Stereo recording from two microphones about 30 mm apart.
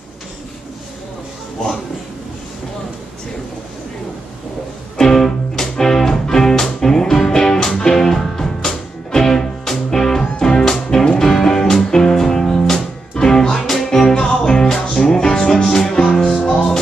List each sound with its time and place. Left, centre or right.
4.9 s music: centre
7.7 s music: left
8.0 s music: centre